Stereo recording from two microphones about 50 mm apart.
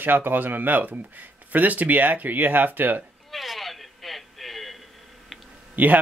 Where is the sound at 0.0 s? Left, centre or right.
Right.